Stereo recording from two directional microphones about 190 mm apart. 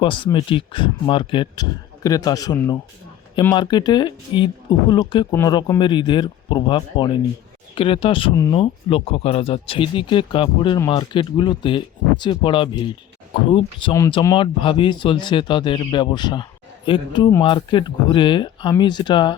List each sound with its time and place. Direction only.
0.0 s speech: 25° left (ahead or behind)